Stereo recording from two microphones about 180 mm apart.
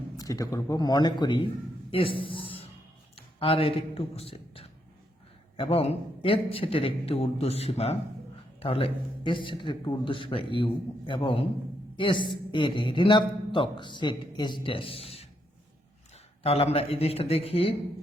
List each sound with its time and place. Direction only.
0.2 s a woman's voice: 20° left (ahead or behind)
1.9 s a sound: 30° left (ahead or behind)
3.2 s a man's voice: 30° left (ahead or behind)
16.4 s a man's voice: 35° left (ahead or behind)